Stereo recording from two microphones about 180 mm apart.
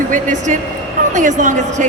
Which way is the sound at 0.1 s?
45° right (ahead or behind).